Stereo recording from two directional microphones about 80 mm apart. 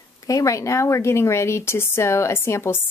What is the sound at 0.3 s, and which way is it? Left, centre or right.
Speech, left.